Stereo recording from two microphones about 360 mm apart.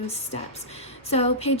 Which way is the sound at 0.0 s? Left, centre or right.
Centre.